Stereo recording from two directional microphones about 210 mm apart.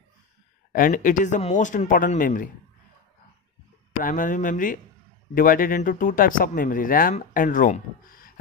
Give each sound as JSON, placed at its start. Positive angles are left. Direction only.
{"t": 0.7, "sound": "speech", "side_deg": 40}
{"t": 4.0, "sound": "speech", "side_deg": 40}